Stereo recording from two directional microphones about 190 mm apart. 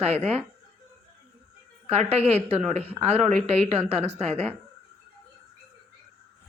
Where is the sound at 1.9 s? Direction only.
35° right (ahead or behind).